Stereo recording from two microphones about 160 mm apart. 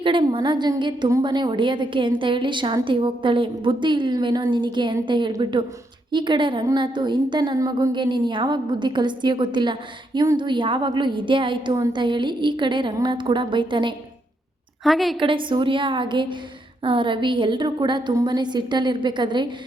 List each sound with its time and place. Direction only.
0.0 s a woman's voice: 30° right (ahead or behind)
14.8 s a woman's voice: centre (ahead or behind)
15.2 s a woman's voice: 30° right (ahead or behind)